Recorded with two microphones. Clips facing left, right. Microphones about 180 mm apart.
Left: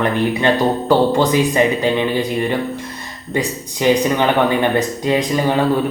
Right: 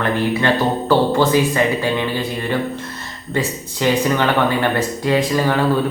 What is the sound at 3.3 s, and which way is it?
Speech, 15° left (ahead or behind).